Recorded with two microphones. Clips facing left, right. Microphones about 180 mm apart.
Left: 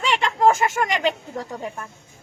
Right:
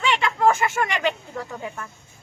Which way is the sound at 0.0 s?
35° left (ahead or behind).